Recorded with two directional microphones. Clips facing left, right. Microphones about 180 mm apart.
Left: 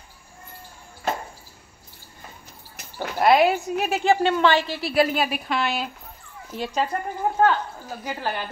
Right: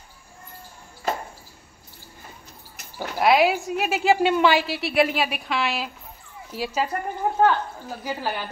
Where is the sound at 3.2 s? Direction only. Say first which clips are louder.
Left 1 dB; centre (ahead or behind).